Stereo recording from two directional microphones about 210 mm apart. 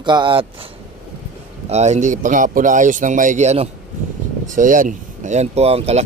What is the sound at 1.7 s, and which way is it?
Speech, 30° right (ahead or behind).